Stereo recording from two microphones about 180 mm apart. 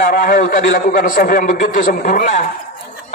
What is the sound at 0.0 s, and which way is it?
A man's voice, 50° left (ahead or behind).